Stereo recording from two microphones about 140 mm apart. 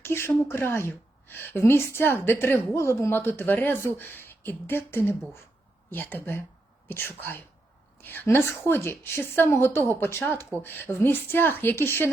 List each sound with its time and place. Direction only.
0.0 s a woman's voice: 15° left (ahead or behind)